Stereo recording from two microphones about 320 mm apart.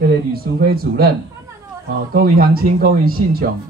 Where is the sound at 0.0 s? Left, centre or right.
Right.